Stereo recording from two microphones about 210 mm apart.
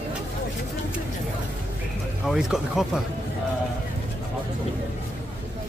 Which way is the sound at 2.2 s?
Centre (ahead or behind).